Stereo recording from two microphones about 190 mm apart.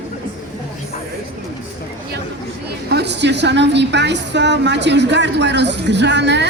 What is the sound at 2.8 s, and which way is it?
A woman's voice, 60° right (ahead or behind).